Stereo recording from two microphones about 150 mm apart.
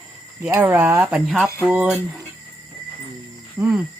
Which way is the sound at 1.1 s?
Centre (ahead or behind).